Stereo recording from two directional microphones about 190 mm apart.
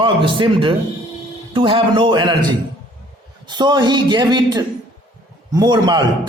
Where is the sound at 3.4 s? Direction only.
25° right (ahead or behind).